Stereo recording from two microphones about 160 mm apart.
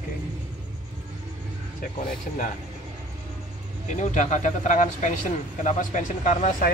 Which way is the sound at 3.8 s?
50° left (ahead or behind).